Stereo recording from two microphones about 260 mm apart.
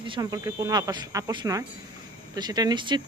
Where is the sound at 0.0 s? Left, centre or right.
Centre.